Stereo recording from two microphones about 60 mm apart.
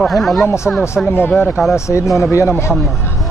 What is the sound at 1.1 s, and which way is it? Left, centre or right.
Speech, left.